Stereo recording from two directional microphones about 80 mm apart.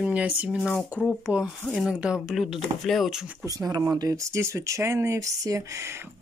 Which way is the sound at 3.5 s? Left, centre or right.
Right.